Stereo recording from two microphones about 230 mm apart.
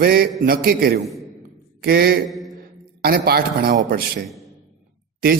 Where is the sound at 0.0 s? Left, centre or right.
Right.